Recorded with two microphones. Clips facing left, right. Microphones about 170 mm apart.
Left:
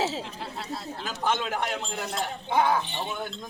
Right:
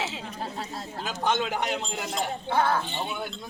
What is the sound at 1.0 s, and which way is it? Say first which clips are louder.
Speech: right 2 dB; 15° right (ahead or behind).